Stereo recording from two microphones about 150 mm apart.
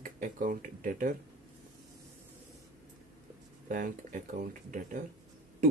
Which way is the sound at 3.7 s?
65° right (ahead or behind).